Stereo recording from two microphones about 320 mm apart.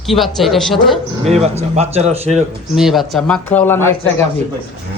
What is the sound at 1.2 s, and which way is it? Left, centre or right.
A man's voice, centre.